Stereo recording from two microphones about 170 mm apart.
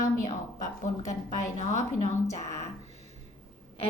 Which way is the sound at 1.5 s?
45° left (ahead or behind).